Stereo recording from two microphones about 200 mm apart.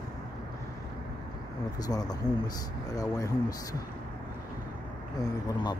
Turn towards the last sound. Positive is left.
turn(degrees=20)  # may be behind; listen again after turning